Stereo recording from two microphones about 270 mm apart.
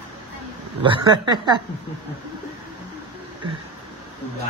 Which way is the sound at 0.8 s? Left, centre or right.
Centre.